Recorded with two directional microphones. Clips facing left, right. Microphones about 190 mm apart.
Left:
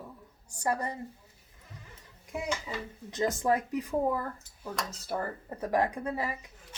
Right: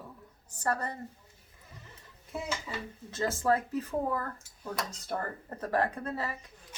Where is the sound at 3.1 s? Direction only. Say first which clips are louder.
Left 1 dB; 15° left (ahead or behind).